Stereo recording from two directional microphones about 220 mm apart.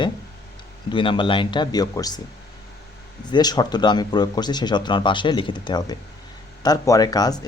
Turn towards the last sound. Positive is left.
turn(degrees=15)  # may be behind; listen again after turning